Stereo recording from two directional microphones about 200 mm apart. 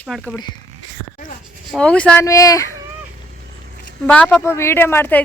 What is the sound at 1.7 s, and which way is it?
Speech, 5° left (ahead or behind).